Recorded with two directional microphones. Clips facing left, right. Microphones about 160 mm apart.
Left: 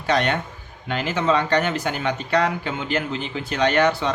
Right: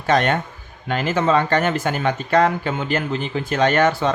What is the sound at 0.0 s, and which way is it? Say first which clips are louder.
Speech: right 3 dB; 45° right (ahead or behind).